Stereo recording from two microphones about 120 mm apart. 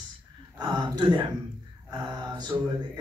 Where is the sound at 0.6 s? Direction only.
35° right (ahead or behind).